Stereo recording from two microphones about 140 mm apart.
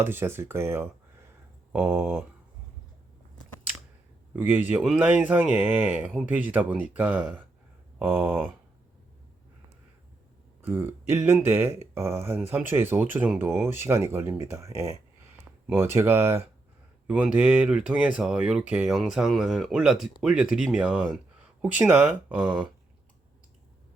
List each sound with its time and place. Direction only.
0.0 s speech: 15° right (ahead or behind)
4.4 s speech: 15° right (ahead or behind)
10.6 s speech: 15° right (ahead or behind)